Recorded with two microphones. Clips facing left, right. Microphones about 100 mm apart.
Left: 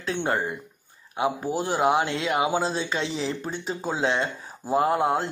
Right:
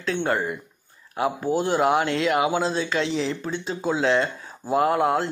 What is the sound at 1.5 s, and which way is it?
Speech, 5° left (ahead or behind).